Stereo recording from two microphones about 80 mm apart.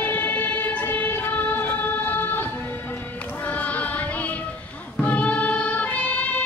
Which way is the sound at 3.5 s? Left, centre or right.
Centre.